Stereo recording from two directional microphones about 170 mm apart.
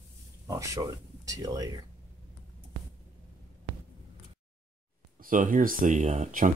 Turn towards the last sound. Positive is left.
turn(degrees=-45)  # may be behind; listen again after turning